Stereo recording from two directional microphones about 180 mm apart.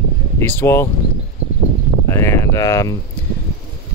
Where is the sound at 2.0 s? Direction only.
15° left (ahead or behind).